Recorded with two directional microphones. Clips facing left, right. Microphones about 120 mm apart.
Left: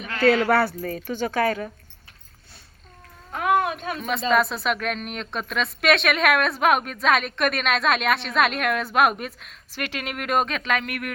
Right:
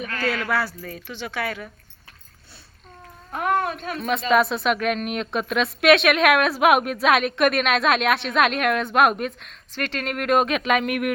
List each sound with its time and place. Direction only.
0.1 s speech: 25° left (ahead or behind)
0.5 s speech: 55° left (ahead or behind); by 1.7 s 40° left (ahead or behind)
3.5 s a sound: 10° left (ahead or behind)
4.3 s a woman's voice: centre (ahead or behind)
10.5 s speech: 15° right (ahead or behind)